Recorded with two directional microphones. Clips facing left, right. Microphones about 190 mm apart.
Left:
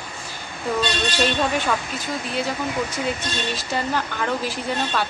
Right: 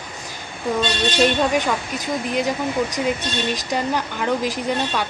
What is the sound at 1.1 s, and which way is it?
Speech, 15° right (ahead or behind).